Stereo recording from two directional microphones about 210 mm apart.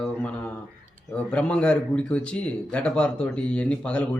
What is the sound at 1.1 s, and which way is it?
Speech, 5° left (ahead or behind).